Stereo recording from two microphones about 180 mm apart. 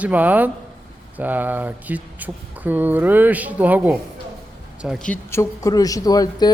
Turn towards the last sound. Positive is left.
turn(degrees=20)  # may be behind; listen again after turning